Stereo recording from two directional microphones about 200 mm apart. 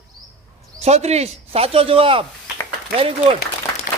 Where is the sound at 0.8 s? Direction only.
35° right (ahead or behind).